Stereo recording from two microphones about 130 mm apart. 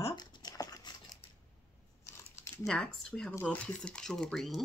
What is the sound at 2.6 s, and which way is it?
Speech, 5° left (ahead or behind).